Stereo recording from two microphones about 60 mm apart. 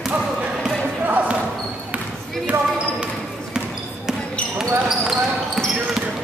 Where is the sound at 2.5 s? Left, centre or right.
Right.